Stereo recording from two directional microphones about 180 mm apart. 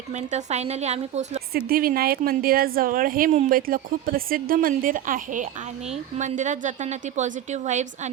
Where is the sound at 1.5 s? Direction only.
55° right (ahead or behind).